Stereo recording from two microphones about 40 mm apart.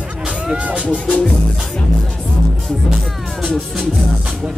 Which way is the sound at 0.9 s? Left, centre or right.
Left.